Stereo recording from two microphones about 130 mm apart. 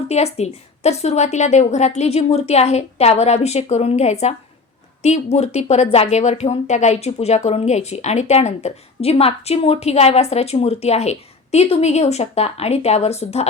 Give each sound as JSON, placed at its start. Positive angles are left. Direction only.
{"t": 0.1, "sound": "a woman's voice", "side_deg": 55}